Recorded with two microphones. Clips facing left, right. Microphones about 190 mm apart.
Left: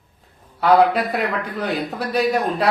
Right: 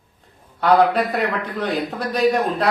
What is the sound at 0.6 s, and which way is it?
A man's voice, 5° left (ahead or behind).